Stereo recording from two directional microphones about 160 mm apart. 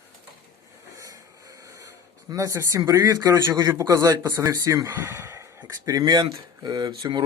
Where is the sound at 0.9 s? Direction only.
20° right (ahead or behind).